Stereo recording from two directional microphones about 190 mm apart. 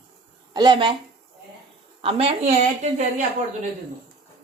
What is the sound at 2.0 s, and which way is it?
Speech, 30° right (ahead or behind).